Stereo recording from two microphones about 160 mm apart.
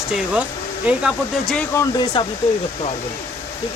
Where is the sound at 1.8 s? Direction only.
25° left (ahead or behind).